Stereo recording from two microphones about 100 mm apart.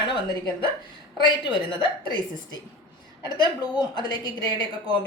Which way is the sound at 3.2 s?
45° left (ahead or behind).